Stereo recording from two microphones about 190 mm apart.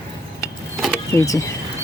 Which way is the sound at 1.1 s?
15° left (ahead or behind).